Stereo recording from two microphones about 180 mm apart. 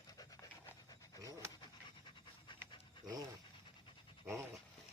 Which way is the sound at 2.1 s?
25° left (ahead or behind).